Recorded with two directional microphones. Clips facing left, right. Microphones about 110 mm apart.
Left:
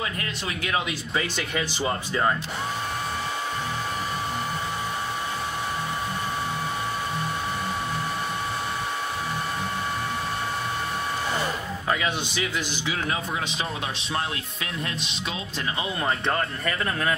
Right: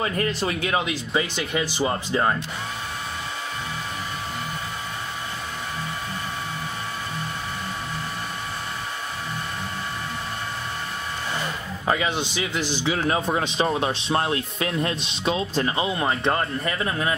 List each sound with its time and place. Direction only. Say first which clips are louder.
0.0 s a man's voice: right 7 dB; 40° right (ahead or behind); by 2.3 s 20° right (ahead or behind)
11.9 s a man's voice: right 3 dB; 25° right (ahead or behind)
16.0 s speech: even; 20° right (ahead or behind)